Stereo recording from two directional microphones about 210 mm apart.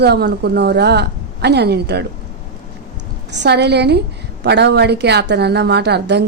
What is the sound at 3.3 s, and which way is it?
Speech, 55° right (ahead or behind).